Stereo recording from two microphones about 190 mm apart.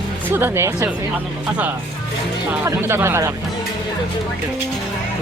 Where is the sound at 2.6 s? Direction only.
15° right (ahead or behind).